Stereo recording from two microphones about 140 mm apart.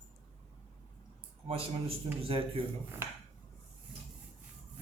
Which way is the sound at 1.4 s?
45° right (ahead or behind).